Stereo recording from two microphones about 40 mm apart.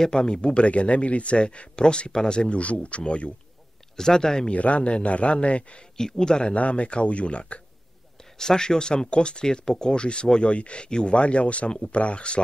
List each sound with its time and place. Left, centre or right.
0.1 s a man's voice: left
3.9 s speech: centre
4.5 s a man's voice: left
5.9 s speech: centre
6.5 s a man's voice: left
8.2 s a man's voice: centre